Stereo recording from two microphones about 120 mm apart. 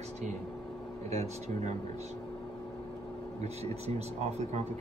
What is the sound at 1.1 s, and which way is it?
Speech, 70° right (ahead or behind).